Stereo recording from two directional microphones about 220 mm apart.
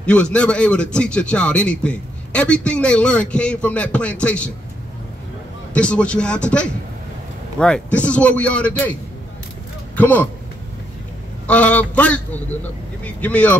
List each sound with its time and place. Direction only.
0.0 s a man's voice: 5° left (ahead or behind)
5.7 s a man's voice: 5° left (ahead or behind)
9.9 s speech: 5° left (ahead or behind)
11.4 s a man's voice: 5° left (ahead or behind)